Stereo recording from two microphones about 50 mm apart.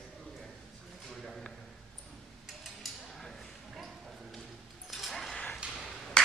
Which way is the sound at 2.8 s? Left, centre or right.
Centre.